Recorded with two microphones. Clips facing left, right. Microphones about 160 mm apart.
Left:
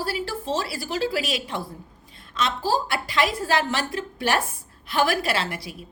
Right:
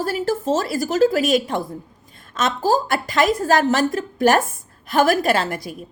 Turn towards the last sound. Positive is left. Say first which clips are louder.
# right 7 dB
turn(degrees=-45)  # may be behind; listen again after turning